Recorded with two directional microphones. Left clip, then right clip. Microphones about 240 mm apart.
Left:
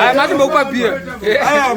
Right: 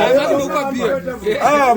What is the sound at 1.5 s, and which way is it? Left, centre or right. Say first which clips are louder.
Speech: right 3 dB; right.